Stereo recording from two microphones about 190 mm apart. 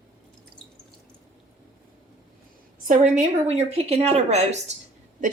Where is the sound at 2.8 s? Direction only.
35° right (ahead or behind).